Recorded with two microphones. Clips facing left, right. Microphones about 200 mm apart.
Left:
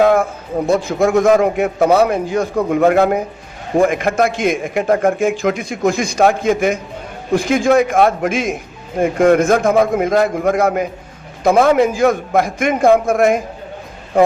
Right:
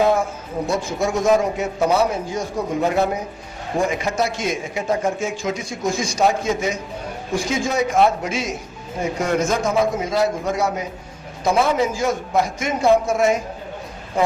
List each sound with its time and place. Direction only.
0.0 s a man's voice: 60° left (ahead or behind)